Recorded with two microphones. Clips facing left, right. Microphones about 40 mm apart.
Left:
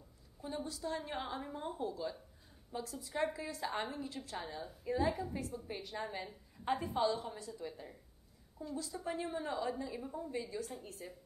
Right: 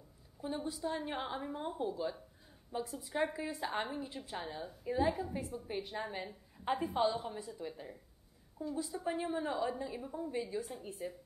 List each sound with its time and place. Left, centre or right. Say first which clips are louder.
0.4 s a woman's voice: right 3 dB; centre
8.6 s a woman's voice: right 4 dB; right; by 10.3 s centre
10.3 s a woman's voice: right 3 dB; centre